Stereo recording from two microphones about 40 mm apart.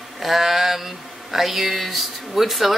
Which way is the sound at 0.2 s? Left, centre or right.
Centre.